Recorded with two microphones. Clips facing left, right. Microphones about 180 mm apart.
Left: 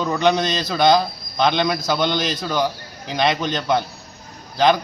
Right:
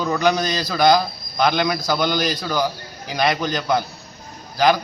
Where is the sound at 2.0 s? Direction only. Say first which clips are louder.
Even; 25° left (ahead or behind).